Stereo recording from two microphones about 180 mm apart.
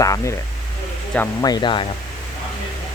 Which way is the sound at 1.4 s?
25° left (ahead or behind).